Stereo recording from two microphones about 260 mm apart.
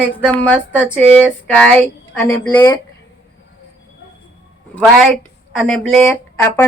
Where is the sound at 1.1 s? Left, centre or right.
Centre.